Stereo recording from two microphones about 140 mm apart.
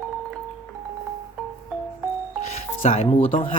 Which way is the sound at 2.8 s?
45° left (ahead or behind).